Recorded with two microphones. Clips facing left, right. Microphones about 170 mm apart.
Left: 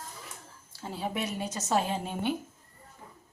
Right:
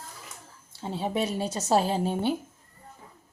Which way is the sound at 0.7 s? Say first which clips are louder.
Right 4 dB; 25° right (ahead or behind).